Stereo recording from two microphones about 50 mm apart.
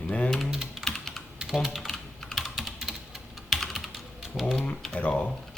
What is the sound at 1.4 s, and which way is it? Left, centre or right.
Speech, centre.